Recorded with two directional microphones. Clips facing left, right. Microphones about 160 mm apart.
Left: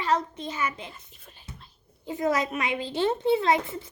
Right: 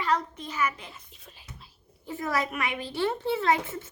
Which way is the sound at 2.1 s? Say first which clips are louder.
Left 4 dB; 20° left (ahead or behind).